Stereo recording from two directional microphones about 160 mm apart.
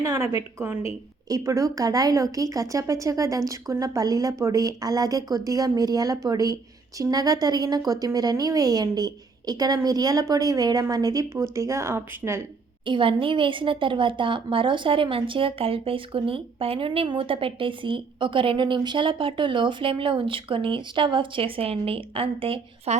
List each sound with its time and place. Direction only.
0.0 s a woman's voice: 20° right (ahead or behind)
12.8 s a woman's voice: 30° right (ahead or behind)